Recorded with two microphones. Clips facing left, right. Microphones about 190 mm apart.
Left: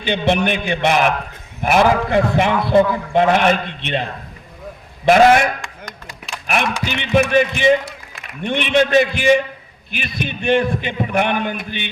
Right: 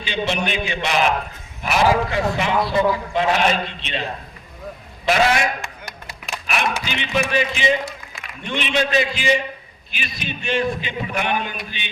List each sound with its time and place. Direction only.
0.0 s a man's voice: 55° left (ahead or behind)
5.0 s a man's voice: 50° left (ahead or behind)
6.8 s a man's voice: 55° left (ahead or behind)